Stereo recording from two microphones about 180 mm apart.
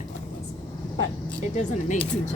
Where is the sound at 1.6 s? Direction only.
40° left (ahead or behind).